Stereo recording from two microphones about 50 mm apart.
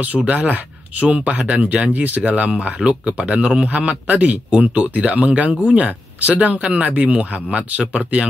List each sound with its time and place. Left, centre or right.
0.0 s speech: right